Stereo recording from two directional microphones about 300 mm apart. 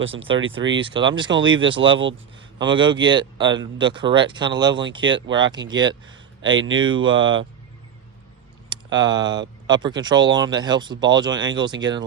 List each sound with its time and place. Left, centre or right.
0.0 s speech: centre
6.4 s speech: right
8.7 s speech: centre